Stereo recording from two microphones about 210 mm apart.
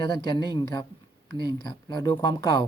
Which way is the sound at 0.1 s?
20° left (ahead or behind).